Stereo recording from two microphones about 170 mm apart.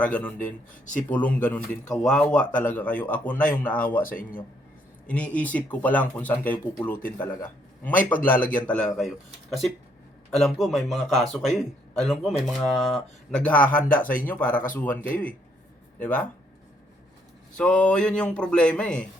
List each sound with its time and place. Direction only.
0.0 s a man's voice: 10° left (ahead or behind)
0.3 s speech: 50° left (ahead or behind)
0.9 s a man's voice: 10° left (ahead or behind)
5.0 s a man's voice: 10° left (ahead or behind)
13.7 s speech: 55° left (ahead or behind)
14.3 s a man's voice: 10° left (ahead or behind)
17.6 s a man's voice: 5° left (ahead or behind)